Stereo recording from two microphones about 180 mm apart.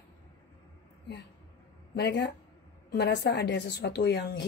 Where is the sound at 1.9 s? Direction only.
70° left (ahead or behind).